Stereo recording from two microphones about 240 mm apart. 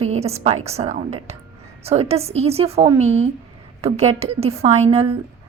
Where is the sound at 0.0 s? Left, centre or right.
Right.